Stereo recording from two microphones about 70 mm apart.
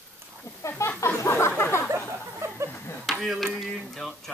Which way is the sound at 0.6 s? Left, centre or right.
Left.